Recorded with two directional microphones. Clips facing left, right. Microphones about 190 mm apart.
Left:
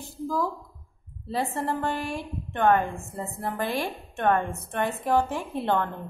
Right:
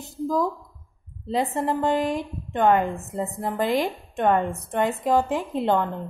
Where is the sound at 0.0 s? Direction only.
20° right (ahead or behind).